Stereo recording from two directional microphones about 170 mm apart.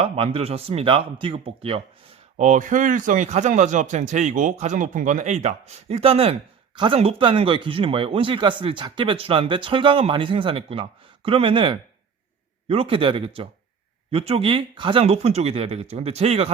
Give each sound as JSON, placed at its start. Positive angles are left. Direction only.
{"t": 0.0, "sound": "speech", "side_deg": -35}
{"t": 2.4, "sound": "a man's voice", "side_deg": -50}